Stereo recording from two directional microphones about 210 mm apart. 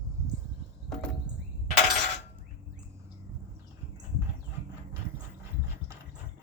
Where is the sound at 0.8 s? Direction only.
5° left (ahead or behind).